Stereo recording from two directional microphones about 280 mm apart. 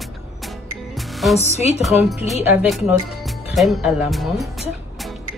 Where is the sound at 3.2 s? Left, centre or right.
Centre.